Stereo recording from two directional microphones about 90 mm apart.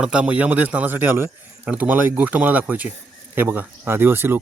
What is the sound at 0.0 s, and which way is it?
Speech, 10° right (ahead or behind).